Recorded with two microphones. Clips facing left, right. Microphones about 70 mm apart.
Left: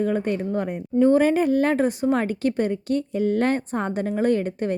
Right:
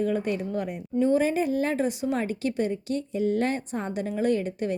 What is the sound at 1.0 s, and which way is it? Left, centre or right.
A woman's voice, left.